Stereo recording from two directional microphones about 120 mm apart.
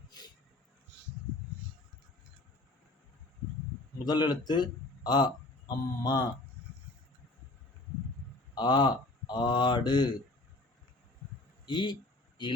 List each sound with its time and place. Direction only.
4.0 s a man's voice: 35° left (ahead or behind)
8.5 s speech: 40° left (ahead or behind)
11.6 s a man's voice: 40° left (ahead or behind)